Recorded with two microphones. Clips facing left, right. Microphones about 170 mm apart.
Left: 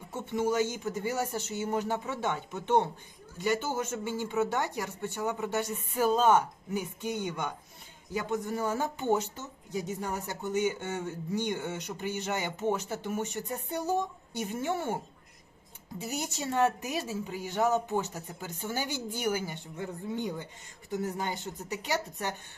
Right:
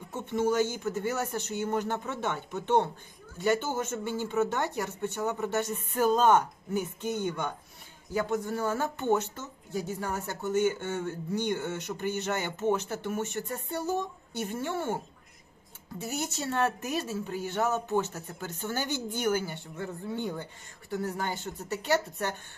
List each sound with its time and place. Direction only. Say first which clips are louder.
0.1 s speech: right 2 dB; 10° left (ahead or behind)
11.3 s speech: right 2 dB; 50° right (ahead or behind)
11.6 s speech: right 3 dB; 15° left (ahead or behind)
16.0 s speech: right 1 dB; 15° left (ahead or behind)